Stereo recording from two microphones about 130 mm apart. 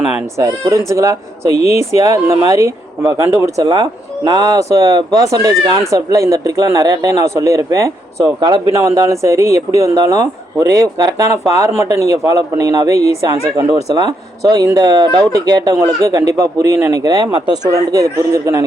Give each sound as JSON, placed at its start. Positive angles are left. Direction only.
{"t": 0.3, "sound": "speech", "side_deg": -25}
{"t": 1.5, "sound": "speech", "side_deg": 55}
{"t": 2.0, "sound": "speech", "side_deg": -25}
{"t": 14.4, "sound": "speech", "side_deg": -30}